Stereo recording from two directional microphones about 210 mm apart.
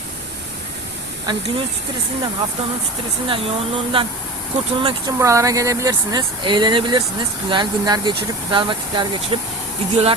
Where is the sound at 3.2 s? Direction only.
25° right (ahead or behind).